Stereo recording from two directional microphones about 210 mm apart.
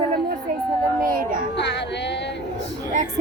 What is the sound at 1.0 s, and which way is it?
Speech, 40° right (ahead or behind).